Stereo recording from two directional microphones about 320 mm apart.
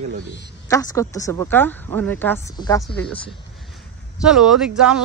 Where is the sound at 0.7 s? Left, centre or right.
Centre.